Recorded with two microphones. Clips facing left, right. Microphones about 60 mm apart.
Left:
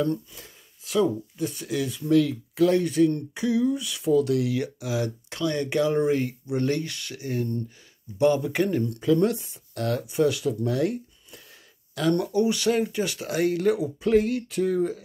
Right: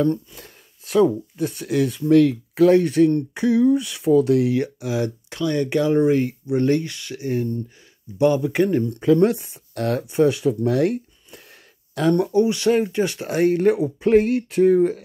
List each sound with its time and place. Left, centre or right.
0.0 s speech: right; by 8.7 s centre
8.7 s speech: right
9.0 s speech: right
12.1 s speech: right